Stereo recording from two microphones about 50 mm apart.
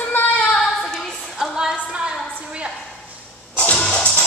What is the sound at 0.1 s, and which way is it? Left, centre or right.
Child singing, left.